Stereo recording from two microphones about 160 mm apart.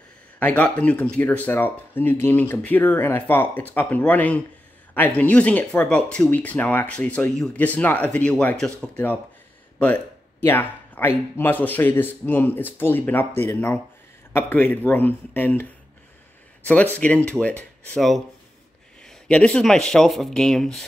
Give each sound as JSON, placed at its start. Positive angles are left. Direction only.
{"t": 0.4, "sound": "speech", "side_deg": 10}
{"t": 10.4, "sound": "speech", "side_deg": 10}
{"t": 16.6, "sound": "speech", "side_deg": 10}
{"t": 19.0, "sound": "speech", "side_deg": 5}